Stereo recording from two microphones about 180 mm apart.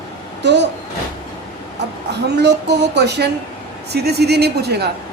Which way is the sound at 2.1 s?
70° right (ahead or behind).